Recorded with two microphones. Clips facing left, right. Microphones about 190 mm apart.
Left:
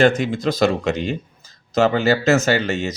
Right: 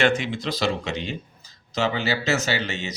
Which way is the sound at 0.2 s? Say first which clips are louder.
Left 8 dB; 45° left (ahead or behind).